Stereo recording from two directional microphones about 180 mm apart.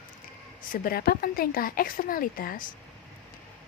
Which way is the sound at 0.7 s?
55° left (ahead or behind).